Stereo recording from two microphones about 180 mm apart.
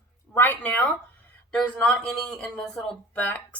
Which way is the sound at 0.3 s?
10° left (ahead or behind).